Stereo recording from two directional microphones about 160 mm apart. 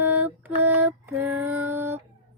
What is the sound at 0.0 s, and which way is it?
Lullaby, 10° right (ahead or behind).